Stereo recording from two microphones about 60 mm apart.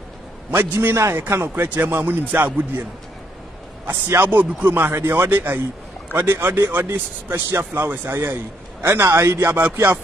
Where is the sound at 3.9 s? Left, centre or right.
Right.